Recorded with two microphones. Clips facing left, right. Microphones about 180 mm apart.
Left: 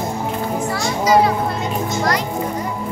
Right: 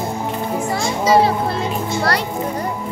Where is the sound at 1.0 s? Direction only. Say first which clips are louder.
Even; 30° right (ahead or behind).